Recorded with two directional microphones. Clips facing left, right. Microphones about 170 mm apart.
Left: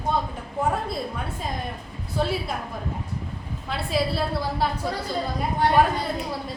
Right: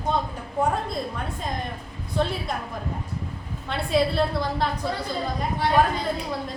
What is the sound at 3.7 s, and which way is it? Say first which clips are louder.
Speech: right 3 dB; centre (ahead or behind).